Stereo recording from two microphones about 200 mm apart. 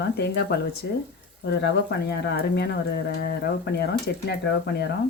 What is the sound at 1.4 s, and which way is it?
Speech, 55° left (ahead or behind).